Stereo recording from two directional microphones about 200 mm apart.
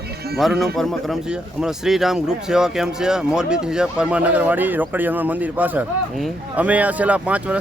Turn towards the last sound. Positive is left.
turn(degrees=-5)  # may be behind; listen again after turning